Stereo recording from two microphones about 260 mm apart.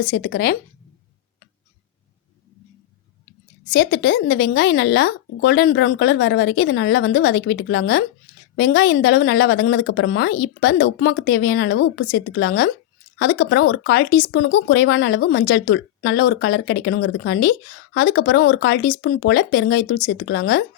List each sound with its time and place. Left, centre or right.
0.1 s speech: left
3.7 s speech: left